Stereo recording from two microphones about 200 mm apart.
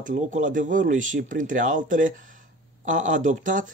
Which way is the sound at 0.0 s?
40° right (ahead or behind).